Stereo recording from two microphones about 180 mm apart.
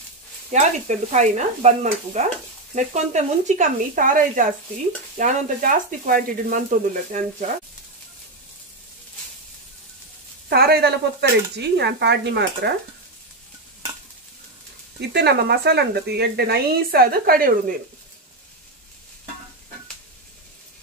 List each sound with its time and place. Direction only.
0.5 s speech: 40° right (ahead or behind)
10.5 s speech: 60° right (ahead or behind)
15.0 s speech: 65° right (ahead or behind); by 17.7 s 50° right (ahead or behind)